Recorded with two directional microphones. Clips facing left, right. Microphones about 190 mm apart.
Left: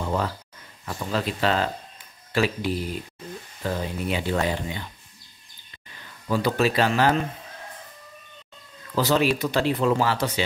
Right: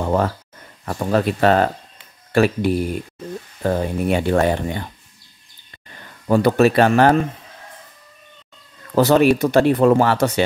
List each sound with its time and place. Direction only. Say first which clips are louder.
0.0 s a sound: right 7 dB; 55° right (ahead or behind)
0.8 s speech: right 8 dB; 55° right (ahead or behind)
8.9 s speech: right 8 dB; 55° right (ahead or behind)